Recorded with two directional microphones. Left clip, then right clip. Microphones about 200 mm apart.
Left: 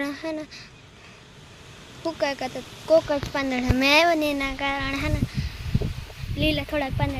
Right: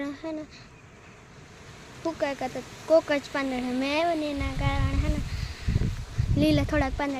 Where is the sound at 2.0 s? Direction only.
Centre (ahead or behind).